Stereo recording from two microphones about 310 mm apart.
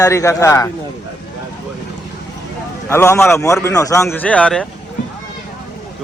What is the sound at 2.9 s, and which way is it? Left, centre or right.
A man's voice, centre.